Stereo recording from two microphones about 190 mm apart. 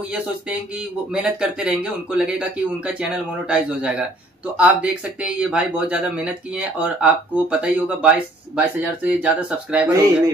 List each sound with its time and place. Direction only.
1.1 s speech: 5° right (ahead or behind)